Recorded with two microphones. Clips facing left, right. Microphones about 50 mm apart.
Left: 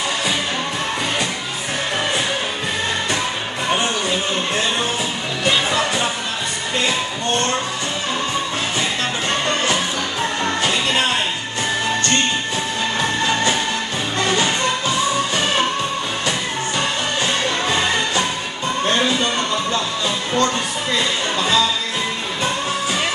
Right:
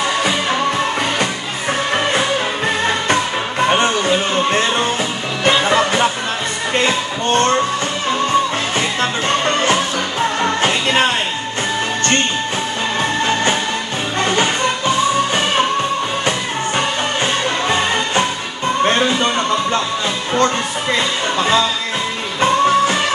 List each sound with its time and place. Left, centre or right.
3.6 s music: right
10.4 s music: right
13.2 s music: right
17.6 s music: right
18.9 s a sound: right
20.3 s music: right